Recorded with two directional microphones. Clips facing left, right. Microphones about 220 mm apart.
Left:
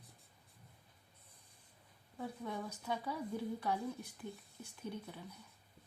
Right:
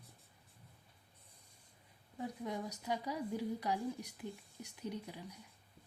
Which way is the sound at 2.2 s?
15° right (ahead or behind).